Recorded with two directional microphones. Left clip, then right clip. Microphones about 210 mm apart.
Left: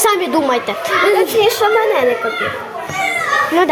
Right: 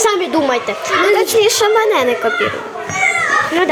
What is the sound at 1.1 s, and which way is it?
Speech, 35° right (ahead or behind).